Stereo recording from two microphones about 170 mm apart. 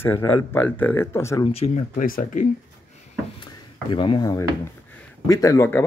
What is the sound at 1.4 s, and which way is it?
Speech, 35° left (ahead or behind).